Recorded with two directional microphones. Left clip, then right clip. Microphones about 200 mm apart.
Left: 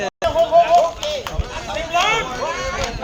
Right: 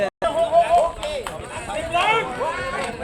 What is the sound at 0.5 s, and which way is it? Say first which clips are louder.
Music: left 4 dB; 15° right (ahead or behind).